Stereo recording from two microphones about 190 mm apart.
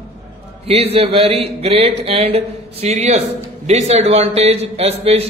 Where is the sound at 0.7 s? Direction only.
30° right (ahead or behind).